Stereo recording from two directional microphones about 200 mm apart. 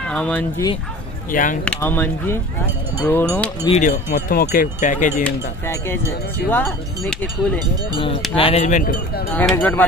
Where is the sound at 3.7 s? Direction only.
35° left (ahead or behind).